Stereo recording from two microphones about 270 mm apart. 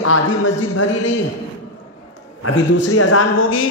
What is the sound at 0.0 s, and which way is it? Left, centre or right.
Speech, left.